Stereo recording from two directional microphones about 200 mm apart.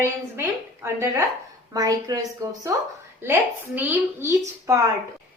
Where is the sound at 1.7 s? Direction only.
20° right (ahead or behind).